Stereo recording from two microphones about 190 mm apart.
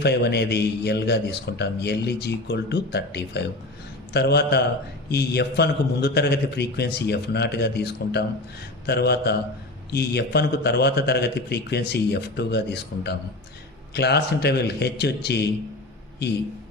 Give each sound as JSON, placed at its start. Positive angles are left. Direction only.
{"t": 0.0, "sound": "a man's voice", "side_deg": 60}